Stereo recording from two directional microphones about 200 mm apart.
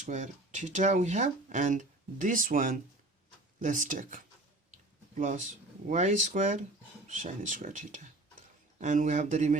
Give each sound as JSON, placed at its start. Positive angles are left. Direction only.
{"t": 0.0, "sound": "speech", "side_deg": -35}